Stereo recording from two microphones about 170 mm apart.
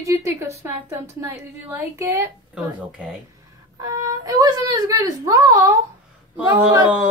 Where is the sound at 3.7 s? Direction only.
20° right (ahead or behind).